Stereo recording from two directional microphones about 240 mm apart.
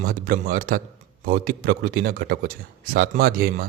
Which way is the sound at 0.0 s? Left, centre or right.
Right.